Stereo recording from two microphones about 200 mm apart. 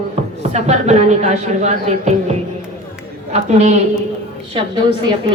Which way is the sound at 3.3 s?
35° right (ahead or behind).